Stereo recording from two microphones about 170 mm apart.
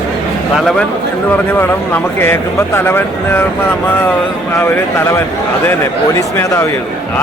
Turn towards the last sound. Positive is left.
turn(degrees=15)  # may be behind; listen again after turning